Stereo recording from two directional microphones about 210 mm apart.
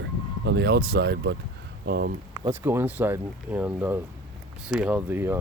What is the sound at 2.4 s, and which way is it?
Speech, 10° right (ahead or behind).